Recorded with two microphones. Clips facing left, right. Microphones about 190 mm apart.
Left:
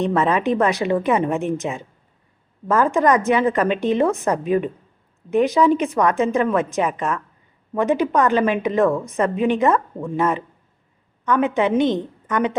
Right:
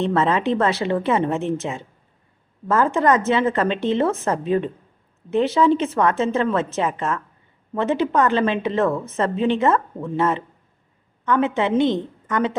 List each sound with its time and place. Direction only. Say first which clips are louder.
0.0 s a woman's voice: left 1 dB; 15° left (ahead or behind)